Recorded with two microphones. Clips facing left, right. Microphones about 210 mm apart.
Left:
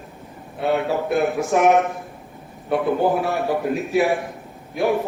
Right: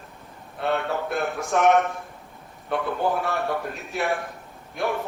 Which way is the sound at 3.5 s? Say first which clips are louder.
Left 8 dB; centre (ahead or behind).